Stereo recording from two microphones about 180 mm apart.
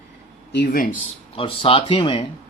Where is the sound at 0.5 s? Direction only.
55° left (ahead or behind).